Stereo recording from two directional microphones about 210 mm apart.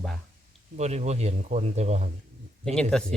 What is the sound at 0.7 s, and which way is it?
A man's voice, 30° right (ahead or behind).